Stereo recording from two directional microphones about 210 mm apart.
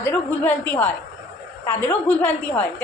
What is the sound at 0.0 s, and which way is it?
A woman's voice, 10° left (ahead or behind).